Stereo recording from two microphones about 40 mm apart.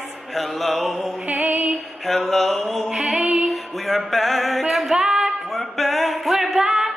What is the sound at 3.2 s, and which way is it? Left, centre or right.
Music, right.